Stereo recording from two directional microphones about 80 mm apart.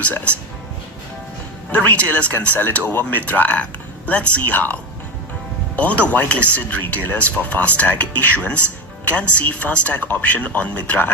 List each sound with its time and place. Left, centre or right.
0.0 s speech: centre
1.7 s speech: centre